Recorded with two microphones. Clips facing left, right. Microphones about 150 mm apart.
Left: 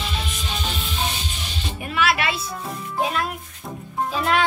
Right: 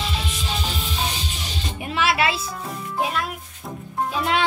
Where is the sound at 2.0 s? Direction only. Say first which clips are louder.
Right 1 dB; 25° right (ahead or behind).